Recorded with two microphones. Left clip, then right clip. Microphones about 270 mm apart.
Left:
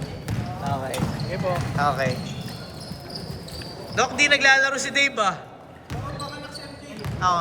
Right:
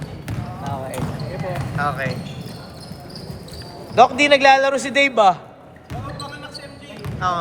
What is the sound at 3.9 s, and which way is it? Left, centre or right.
A man's voice, centre.